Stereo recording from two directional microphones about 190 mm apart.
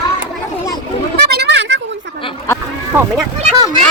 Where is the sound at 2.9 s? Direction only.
10° right (ahead or behind).